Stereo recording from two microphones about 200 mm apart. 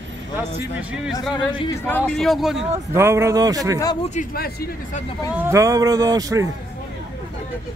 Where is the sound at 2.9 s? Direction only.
15° right (ahead or behind).